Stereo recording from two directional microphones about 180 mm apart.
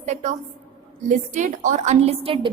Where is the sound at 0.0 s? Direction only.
40° right (ahead or behind).